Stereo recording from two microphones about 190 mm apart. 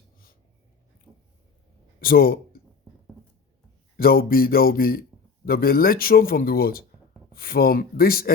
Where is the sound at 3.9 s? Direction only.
50° left (ahead or behind).